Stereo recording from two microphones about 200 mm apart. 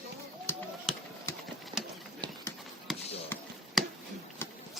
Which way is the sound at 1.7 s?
20° right (ahead or behind).